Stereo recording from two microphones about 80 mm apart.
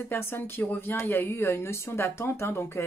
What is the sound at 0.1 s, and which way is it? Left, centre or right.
Speech, left.